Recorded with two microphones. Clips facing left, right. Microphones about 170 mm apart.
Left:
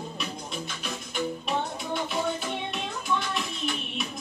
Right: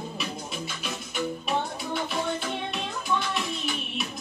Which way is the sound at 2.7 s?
Centre (ahead or behind).